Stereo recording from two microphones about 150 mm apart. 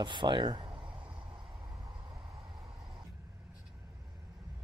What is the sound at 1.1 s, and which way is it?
Vehicle, 30° right (ahead or behind).